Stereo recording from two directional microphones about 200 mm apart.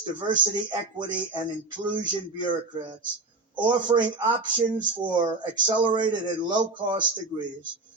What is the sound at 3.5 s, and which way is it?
Speech, 20° right (ahead or behind).